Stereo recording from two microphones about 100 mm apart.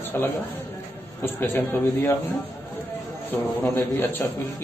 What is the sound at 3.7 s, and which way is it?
Speech, 20° left (ahead or behind).